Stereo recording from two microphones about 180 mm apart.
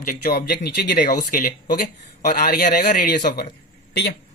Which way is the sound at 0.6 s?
65° left (ahead or behind).